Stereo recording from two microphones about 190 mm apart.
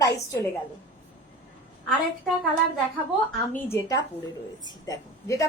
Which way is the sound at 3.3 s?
10° left (ahead or behind).